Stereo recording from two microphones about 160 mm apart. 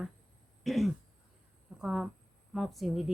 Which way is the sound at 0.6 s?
Centre (ahead or behind).